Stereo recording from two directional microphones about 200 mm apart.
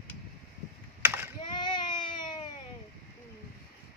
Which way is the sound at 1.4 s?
20° left (ahead or behind).